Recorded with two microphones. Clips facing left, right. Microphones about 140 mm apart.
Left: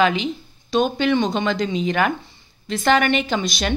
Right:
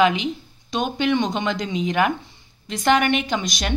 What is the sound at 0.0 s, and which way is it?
Speech, 15° right (ahead or behind).